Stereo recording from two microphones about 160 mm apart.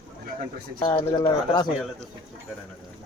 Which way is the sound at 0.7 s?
30° left (ahead or behind).